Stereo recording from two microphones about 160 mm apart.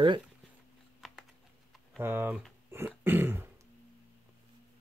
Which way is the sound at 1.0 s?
Centre (ahead or behind).